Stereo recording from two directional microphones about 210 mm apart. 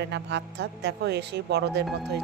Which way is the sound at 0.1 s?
55° right (ahead or behind).